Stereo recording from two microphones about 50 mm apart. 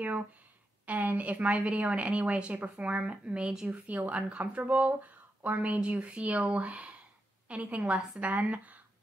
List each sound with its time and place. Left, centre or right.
0.8 s a woman's voice: right